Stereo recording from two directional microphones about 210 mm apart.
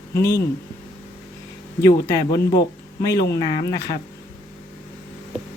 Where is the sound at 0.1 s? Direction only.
15° left (ahead or behind).